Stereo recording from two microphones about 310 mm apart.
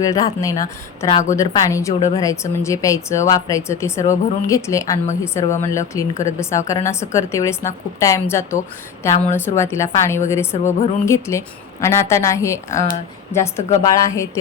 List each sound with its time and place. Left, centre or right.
0.0 s a woman's voice: centre
1.1 s speech: left
1.4 s a woman's voice: centre
12.7 s speech: left
13.7 s a woman's voice: centre